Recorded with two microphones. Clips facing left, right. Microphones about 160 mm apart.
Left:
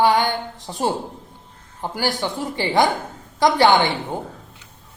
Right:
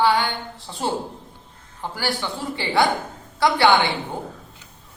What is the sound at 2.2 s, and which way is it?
Speech, 40° left (ahead or behind).